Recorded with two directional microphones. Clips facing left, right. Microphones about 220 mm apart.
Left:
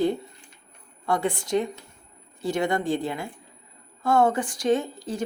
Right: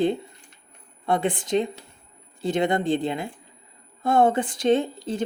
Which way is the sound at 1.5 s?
25° right (ahead or behind).